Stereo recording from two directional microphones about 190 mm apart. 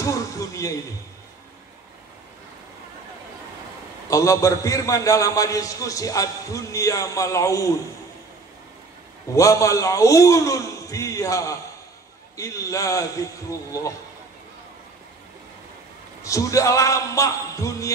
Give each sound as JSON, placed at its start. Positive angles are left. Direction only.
{"t": 0.0, "sound": "a man's voice", "side_deg": 15}
{"t": 4.1, "sound": "a man's voice", "side_deg": 15}
{"t": 9.3, "sound": "a man's voice", "side_deg": 15}
{"t": 16.3, "sound": "a man's voice", "side_deg": 15}